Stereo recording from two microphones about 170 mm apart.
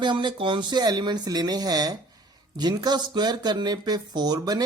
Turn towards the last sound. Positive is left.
turn(degrees=-20)  # may be behind; listen again after turning